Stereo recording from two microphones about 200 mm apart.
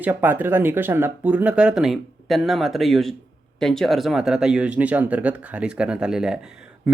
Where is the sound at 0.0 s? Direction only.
10° right (ahead or behind).